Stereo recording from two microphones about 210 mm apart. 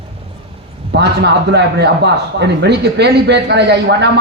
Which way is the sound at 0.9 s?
55° right (ahead or behind).